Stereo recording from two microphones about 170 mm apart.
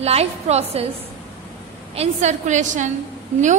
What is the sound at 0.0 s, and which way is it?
Speech, 40° right (ahead or behind).